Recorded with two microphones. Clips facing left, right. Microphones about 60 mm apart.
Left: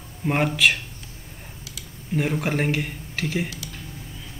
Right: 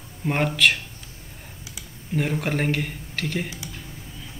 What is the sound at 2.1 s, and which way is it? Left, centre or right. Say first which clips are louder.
Speech: left 1 dB; centre.